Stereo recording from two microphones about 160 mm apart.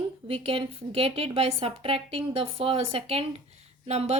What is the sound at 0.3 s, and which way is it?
A woman's voice, 35° right (ahead or behind).